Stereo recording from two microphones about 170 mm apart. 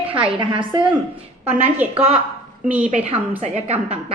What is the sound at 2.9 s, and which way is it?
A woman's voice, 40° right (ahead or behind).